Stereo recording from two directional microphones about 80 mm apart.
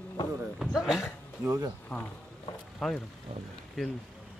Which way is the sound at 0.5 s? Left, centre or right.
Centre.